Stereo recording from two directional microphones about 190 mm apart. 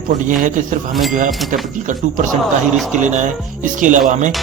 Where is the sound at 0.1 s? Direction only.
45° right (ahead or behind).